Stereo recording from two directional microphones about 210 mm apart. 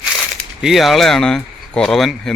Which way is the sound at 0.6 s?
Centre (ahead or behind).